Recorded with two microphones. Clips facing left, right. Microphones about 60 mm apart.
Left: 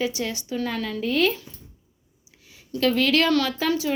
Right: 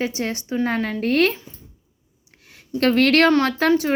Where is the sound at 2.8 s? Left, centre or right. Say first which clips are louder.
Right 5 dB; right.